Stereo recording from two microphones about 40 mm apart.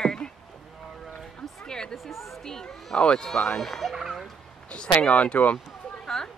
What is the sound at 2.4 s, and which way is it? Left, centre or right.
Speech, centre.